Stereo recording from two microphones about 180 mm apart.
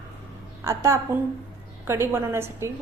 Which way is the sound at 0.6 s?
15° right (ahead or behind).